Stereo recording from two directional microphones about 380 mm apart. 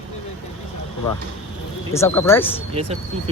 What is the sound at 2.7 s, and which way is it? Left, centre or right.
Speech, centre.